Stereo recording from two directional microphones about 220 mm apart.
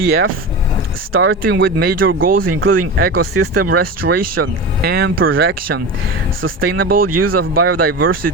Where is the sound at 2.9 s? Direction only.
45° right (ahead or behind).